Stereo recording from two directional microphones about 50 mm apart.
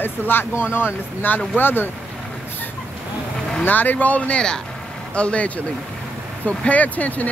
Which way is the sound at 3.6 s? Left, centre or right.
Left.